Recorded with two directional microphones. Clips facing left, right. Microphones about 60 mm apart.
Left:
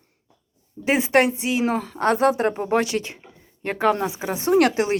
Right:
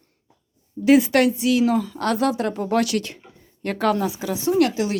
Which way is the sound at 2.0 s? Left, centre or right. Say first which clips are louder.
Left 3 dB; left.